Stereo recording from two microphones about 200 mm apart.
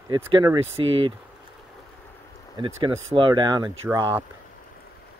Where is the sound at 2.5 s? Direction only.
25° right (ahead or behind).